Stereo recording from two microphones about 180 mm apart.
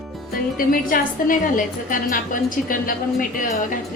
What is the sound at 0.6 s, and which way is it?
A woman's voice, 50° left (ahead or behind).